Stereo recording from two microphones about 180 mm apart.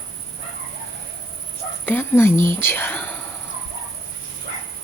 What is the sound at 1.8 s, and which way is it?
Speech, 10° left (ahead or behind).